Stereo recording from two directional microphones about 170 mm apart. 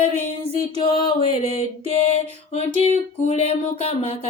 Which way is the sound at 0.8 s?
35° left (ahead or behind).